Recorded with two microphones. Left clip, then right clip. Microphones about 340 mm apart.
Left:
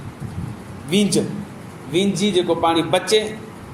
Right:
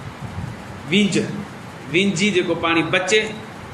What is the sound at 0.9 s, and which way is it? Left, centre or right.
A man's voice, centre.